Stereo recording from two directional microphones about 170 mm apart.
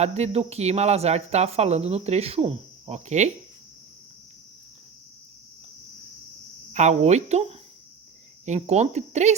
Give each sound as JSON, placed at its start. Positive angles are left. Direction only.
{"t": 0.0, "sound": "speech", "side_deg": -40}
{"t": 6.7, "sound": "speech", "side_deg": -40}
{"t": 8.4, "sound": "speech", "side_deg": -40}